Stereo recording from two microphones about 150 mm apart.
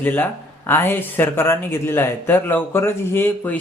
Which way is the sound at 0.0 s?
10° left (ahead or behind).